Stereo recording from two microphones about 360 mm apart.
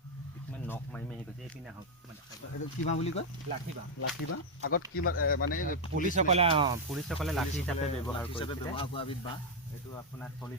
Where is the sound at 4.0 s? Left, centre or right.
Left.